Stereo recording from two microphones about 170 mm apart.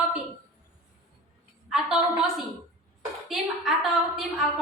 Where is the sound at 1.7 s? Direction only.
5° right (ahead or behind).